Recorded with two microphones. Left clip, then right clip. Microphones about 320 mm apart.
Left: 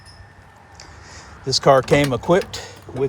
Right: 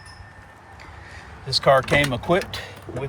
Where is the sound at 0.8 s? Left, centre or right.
Centre.